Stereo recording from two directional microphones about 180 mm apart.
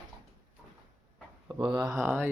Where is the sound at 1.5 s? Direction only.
25° right (ahead or behind).